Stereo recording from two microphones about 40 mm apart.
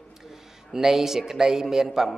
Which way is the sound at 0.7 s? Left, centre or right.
Centre.